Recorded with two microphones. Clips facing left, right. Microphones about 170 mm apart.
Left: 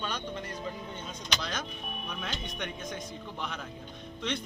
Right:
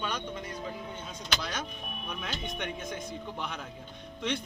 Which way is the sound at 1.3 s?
10° right (ahead or behind).